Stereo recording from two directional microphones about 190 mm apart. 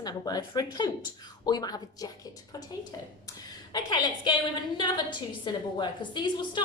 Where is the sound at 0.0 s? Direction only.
20° left (ahead or behind).